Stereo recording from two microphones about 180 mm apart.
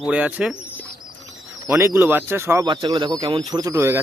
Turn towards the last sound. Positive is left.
turn(degrees=-15)  # may be behind; listen again after turning